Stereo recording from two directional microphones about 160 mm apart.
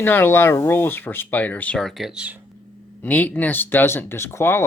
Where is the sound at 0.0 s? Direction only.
15° left (ahead or behind); by 2.3 s 5° right (ahead or behind).